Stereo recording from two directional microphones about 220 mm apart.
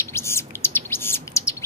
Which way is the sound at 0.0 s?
10° left (ahead or behind).